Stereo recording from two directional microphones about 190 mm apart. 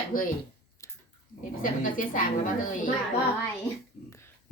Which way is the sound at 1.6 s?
45° left (ahead or behind).